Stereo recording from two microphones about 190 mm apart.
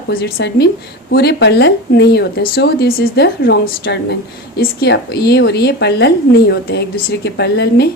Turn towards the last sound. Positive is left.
turn(degrees=60)  # may be behind; listen again after turning